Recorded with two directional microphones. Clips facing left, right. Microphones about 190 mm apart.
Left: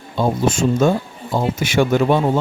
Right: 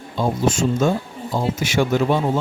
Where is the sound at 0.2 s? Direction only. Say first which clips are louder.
Left 2 dB; 55° left (ahead or behind).